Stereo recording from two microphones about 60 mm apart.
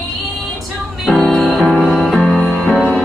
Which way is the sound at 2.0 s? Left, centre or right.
Centre.